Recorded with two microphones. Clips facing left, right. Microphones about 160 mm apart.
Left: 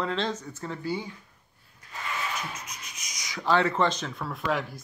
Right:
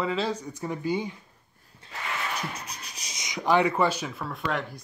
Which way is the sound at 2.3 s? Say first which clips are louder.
Right 2 dB; 35° right (ahead or behind).